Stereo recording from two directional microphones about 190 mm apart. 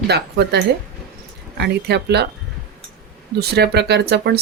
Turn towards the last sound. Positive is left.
turn(degrees=-60)  # may be behind; listen again after turning